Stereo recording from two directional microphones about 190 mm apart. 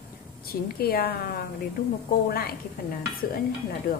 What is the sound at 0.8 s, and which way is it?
A woman's voice, 55° left (ahead or behind).